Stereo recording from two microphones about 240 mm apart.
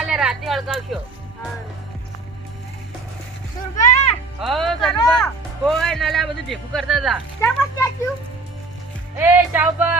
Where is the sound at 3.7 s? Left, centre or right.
Left.